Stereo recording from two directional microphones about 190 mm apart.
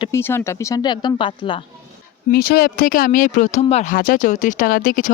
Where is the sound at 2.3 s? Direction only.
50° left (ahead or behind); by 3.9 s 35° left (ahead or behind).